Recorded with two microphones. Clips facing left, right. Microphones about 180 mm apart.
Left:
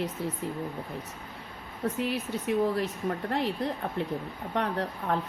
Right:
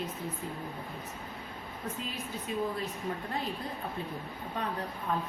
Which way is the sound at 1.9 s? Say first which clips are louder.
Left 8 dB; 75° left (ahead or behind).